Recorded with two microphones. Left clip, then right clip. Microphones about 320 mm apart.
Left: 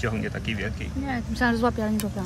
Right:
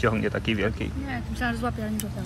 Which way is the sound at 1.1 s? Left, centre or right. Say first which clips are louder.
Left 6 dB; left.